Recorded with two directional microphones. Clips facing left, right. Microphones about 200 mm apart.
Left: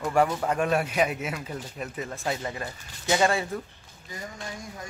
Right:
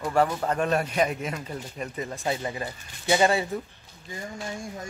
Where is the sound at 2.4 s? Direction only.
10° right (ahead or behind).